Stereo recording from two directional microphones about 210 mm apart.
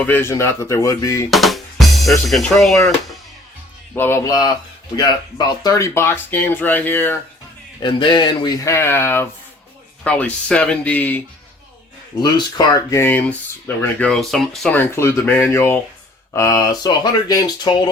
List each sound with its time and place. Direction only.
0.0 s speech: 10° left (ahead or behind)
1.3 s speech: centre (ahead or behind)
3.9 s speech: 10° left (ahead or behind)
7.8 s speech: 20° left (ahead or behind); by 11.2 s 5° left (ahead or behind)
12.2 s speech: 20° left (ahead or behind)